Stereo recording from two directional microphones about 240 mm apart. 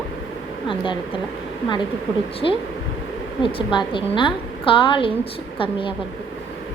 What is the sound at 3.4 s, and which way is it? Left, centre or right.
A woman's voice, left.